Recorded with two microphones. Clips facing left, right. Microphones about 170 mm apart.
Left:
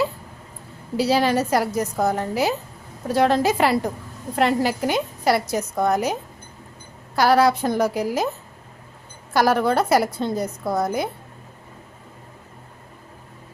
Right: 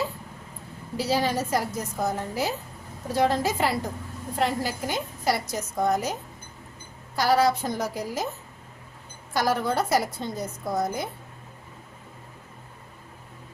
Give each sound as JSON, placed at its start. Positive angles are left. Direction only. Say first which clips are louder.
{"t": 0.9, "sound": "a woman's voice", "louder": "left 6 dB", "side_deg": 75}
{"t": 7.2, "sound": "a woman's voice", "louder": "left 5 dB", "side_deg": 65}
{"t": 9.3, "sound": "a woman's voice", "louder": "left 6 dB", "side_deg": 65}